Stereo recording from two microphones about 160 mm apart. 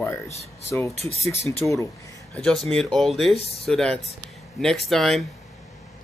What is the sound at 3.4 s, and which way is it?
Speech, 40° left (ahead or behind).